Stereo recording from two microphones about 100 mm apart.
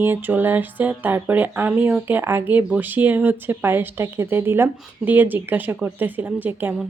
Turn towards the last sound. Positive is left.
turn(degrees=-20)  # may be behind; listen again after turning